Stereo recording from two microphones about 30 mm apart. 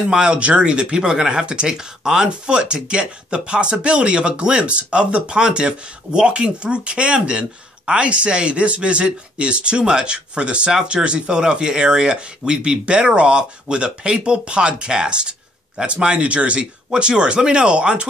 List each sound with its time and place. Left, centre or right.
0.3 s speech: right
10.7 s speech: right
16.9 s speech: right